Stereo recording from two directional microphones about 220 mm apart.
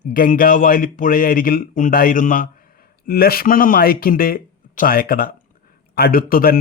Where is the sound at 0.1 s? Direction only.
40° left (ahead or behind).